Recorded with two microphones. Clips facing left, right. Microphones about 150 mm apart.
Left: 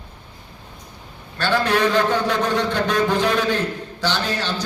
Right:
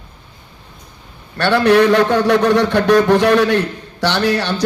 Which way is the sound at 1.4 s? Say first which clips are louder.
Right 7 dB; 65° right (ahead or behind).